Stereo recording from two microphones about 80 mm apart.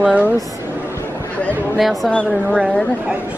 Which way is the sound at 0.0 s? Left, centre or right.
Centre.